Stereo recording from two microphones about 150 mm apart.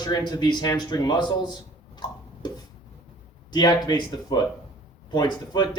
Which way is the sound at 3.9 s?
30° left (ahead or behind).